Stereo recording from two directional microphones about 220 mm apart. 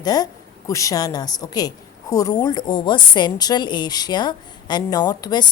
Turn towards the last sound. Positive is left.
turn(degrees=20)  # may be behind; listen again after turning